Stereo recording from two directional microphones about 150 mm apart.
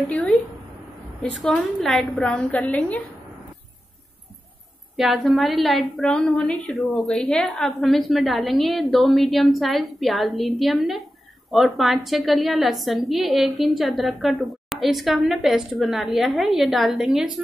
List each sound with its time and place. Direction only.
0.1 s a woman's voice: 5° left (ahead or behind)
1.4 s a woman's voice: centre (ahead or behind)
4.9 s a woman's voice: centre (ahead or behind)